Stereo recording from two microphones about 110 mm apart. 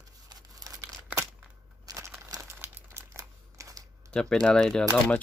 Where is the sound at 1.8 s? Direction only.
30° right (ahead or behind).